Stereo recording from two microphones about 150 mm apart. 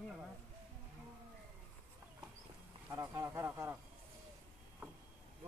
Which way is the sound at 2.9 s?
20° right (ahead or behind).